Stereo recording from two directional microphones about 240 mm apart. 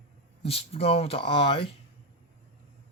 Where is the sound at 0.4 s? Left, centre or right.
Left.